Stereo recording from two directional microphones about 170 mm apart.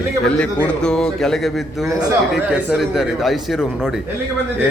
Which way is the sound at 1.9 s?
20° right (ahead or behind).